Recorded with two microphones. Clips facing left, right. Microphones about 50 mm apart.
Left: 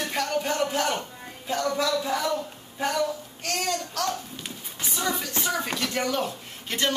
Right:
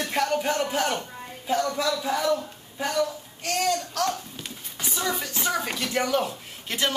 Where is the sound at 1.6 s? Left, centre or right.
Centre.